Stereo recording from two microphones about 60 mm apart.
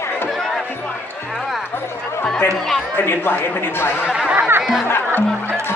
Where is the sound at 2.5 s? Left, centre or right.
Centre.